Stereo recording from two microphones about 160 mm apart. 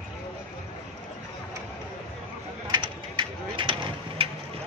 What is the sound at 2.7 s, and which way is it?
Vehicle, 30° right (ahead or behind).